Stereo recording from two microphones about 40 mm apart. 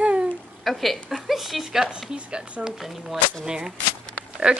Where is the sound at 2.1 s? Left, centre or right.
Right.